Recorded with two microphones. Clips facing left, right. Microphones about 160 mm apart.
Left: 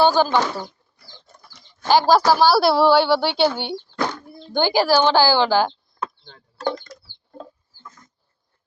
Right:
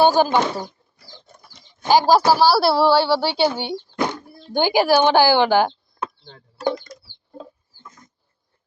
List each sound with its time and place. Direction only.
0.0 s speech: 15° right (ahead or behind)
1.4 s chicken: 20° right (ahead or behind)
1.9 s a woman's voice: 10° right (ahead or behind)
3.9 s a sound: 20° right (ahead or behind)
4.5 s speech: 15° right (ahead or behind)
6.6 s speech: 10° right (ahead or behind)
7.3 s rodents: 15° right (ahead or behind)